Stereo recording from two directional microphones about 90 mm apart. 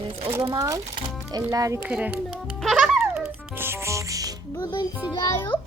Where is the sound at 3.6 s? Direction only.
30° right (ahead or behind).